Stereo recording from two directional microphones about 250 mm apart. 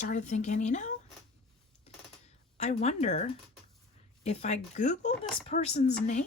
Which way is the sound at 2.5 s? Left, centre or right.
Left.